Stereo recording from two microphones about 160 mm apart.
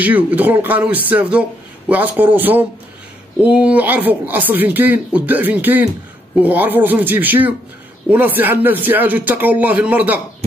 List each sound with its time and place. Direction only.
0.0 s speech: 10° right (ahead or behind)